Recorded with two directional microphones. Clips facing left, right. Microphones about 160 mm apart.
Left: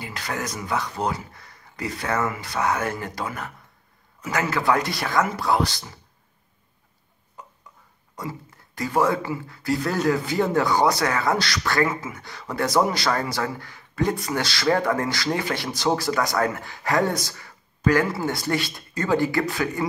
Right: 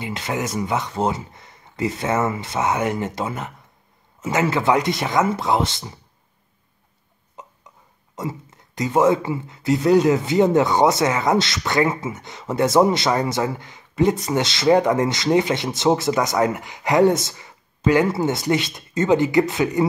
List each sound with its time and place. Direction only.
0.0 s speech: 20° right (ahead or behind)
7.4 s a sound: 20° right (ahead or behind)
8.2 s speech: 25° right (ahead or behind)